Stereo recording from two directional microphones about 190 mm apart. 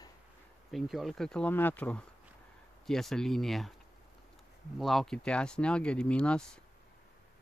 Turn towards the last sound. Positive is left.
turn(degrees=5)  # may be behind; listen again after turning